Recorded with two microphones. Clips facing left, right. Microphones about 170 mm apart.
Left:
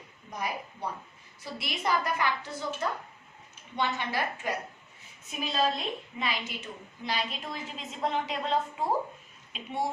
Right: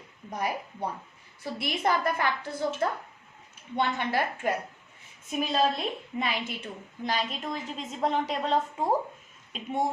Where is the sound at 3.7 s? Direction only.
50° right (ahead or behind).